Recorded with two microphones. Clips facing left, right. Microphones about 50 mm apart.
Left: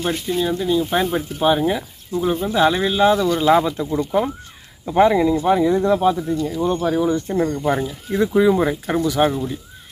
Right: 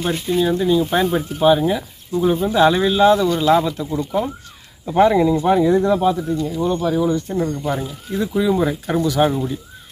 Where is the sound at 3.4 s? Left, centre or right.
Centre.